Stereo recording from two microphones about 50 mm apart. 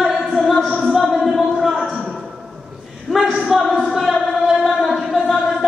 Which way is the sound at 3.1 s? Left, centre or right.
Centre.